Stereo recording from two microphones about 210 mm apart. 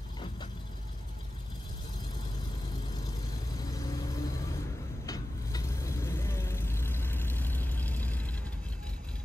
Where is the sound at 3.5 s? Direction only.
15° left (ahead or behind).